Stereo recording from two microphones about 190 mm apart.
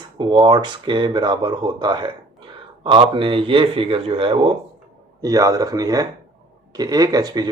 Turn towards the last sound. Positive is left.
turn(degrees=-20)  # may be behind; listen again after turning